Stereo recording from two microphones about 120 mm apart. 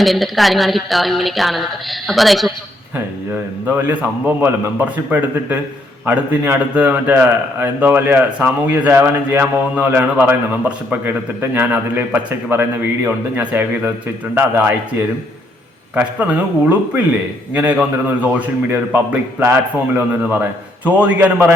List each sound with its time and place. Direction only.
0.0 s speech: centre (ahead or behind)
3.8 s a man's voice: 15° right (ahead or behind)